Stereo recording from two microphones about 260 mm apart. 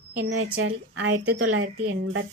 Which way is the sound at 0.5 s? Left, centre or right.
Right.